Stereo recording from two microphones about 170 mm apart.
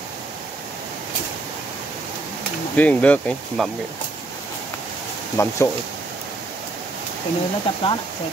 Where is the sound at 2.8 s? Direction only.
10° left (ahead or behind).